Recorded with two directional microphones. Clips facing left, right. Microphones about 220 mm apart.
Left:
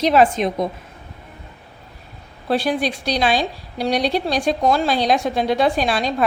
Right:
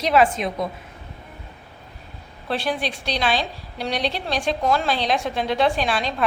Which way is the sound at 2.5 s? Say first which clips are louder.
Left 5 dB; 40° left (ahead or behind).